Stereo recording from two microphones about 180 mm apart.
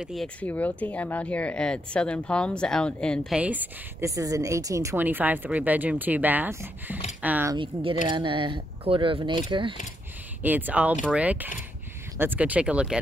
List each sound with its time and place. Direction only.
0.0 s speech: centre (ahead or behind)
3.3 s a woman's voice: 10° right (ahead or behind)
7.5 s speech: 30° right (ahead or behind)
10.4 s a woman's voice: 10° right (ahead or behind)